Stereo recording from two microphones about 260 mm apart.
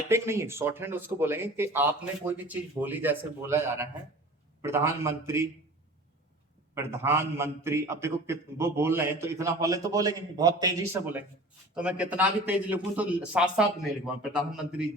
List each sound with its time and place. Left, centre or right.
0.1 s a man's voice: centre
6.7 s a man's voice: centre